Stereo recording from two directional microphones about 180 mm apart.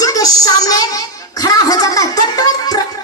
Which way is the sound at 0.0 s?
20° left (ahead or behind).